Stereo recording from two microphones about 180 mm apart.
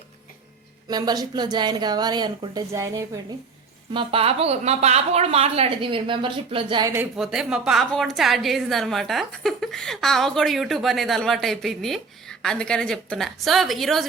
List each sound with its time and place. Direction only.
0.9 s a woman's voice: 20° right (ahead or behind)
3.9 s speech: 30° right (ahead or behind)
7.2 s a woman's voice: 5° right (ahead or behind)